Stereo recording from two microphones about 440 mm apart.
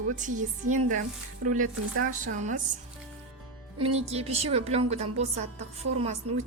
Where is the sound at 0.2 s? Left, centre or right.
Centre.